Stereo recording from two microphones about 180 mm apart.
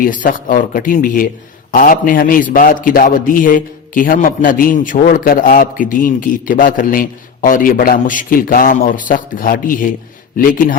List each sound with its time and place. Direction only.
0.0 s a man's voice: 50° left (ahead or behind)